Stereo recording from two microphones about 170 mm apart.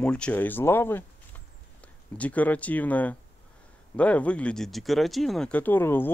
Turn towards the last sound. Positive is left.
turn(degrees=10)  # may be behind; listen again after turning